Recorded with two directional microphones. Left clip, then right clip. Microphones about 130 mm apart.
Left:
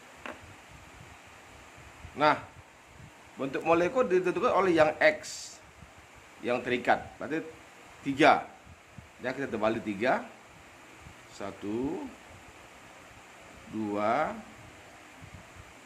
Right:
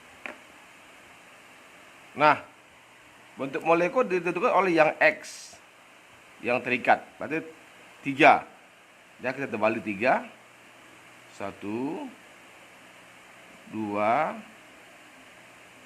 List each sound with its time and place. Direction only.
2.1 s speech: 45° right (ahead or behind)
3.3 s a man's voice: 25° right (ahead or behind)
6.4 s a man's voice: 35° right (ahead or behind)
11.3 s a man's voice: 40° right (ahead or behind)
13.9 s a man's voice: 40° right (ahead or behind)